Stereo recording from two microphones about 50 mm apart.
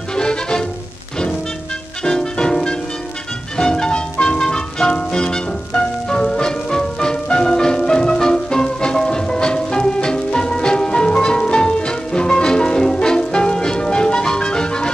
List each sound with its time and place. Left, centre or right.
0.1 s music: centre
2.0 s music: centre